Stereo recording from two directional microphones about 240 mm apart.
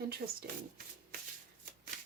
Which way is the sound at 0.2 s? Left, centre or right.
Right.